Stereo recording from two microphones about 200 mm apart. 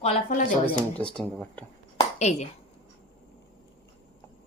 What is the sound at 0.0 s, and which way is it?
Speech, 40° left (ahead or behind).